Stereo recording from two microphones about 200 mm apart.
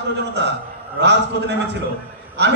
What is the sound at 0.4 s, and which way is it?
Speech, 60° right (ahead or behind).